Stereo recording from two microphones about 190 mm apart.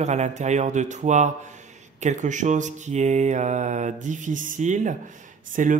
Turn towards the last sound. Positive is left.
turn(degrees=-45)  # may be behind; listen again after turning